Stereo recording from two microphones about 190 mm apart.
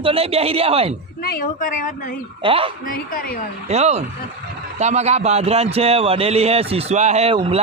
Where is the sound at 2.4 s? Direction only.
30° right (ahead or behind).